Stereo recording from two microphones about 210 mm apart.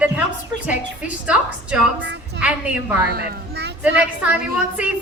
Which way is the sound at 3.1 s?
45° right (ahead or behind).